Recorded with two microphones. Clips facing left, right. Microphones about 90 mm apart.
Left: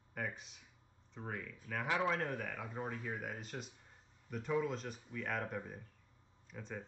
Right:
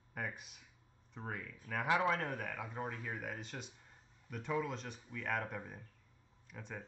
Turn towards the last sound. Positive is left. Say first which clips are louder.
# left 1 dB
turn(degrees=0)  # may be behind; listen again after turning